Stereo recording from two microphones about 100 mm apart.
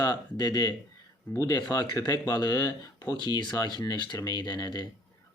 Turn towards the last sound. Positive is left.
turn(degrees=45)  # may be behind; listen again after turning